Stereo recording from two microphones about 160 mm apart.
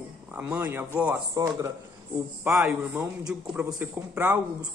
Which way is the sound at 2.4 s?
5° right (ahead or behind).